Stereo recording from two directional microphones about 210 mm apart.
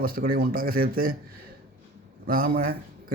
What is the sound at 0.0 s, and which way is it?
A man's voice, 45° right (ahead or behind).